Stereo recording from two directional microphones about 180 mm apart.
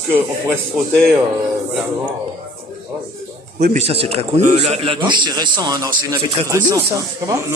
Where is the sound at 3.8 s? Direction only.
35° right (ahead or behind); by 7.4 s 15° right (ahead or behind).